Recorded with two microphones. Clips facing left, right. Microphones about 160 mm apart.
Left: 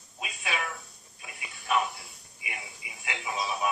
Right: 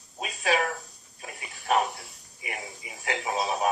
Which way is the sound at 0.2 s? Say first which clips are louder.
Right 8 dB; 35° right (ahead or behind).